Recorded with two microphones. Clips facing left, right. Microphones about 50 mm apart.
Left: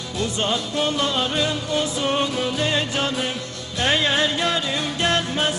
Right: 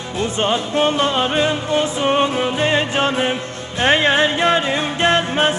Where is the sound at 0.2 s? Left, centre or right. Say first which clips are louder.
Right 5 dB; right.